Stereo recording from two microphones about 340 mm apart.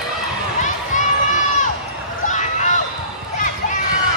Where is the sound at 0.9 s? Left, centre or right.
Left.